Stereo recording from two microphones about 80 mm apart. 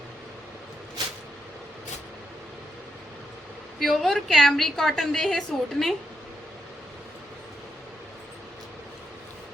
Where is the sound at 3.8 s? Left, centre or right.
Centre.